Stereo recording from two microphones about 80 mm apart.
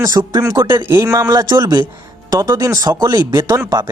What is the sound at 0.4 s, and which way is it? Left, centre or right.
Speech, right.